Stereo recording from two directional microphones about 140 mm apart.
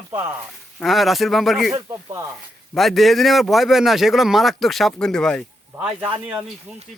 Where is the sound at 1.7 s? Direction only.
20° right (ahead or behind).